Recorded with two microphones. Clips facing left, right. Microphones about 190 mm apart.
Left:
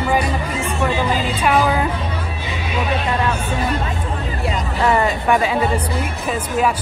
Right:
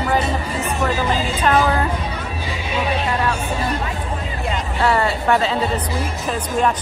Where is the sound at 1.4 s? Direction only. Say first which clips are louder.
Even; 10° left (ahead or behind).